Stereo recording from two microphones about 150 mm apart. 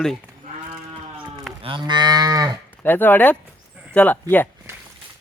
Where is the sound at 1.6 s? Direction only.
30° right (ahead or behind).